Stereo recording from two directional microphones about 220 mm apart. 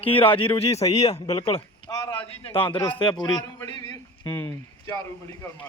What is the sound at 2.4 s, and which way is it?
Speech, 25° left (ahead or behind).